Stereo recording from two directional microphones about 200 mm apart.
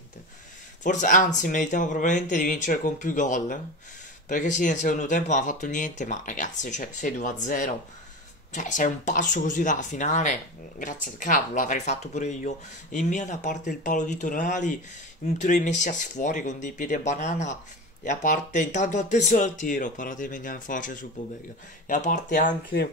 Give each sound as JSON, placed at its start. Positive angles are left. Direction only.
{"t": 0.8, "sound": "speech", "side_deg": 40}